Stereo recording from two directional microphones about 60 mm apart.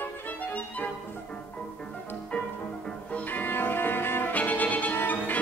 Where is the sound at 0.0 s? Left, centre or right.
Left.